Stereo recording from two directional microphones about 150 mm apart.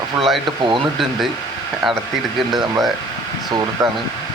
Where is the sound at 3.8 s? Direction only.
25° right (ahead or behind).